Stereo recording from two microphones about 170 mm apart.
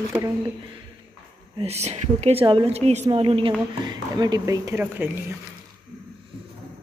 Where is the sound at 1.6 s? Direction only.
40° right (ahead or behind); by 5.4 s 10° right (ahead or behind).